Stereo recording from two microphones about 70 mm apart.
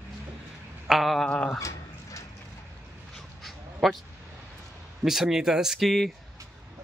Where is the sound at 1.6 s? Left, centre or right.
Left.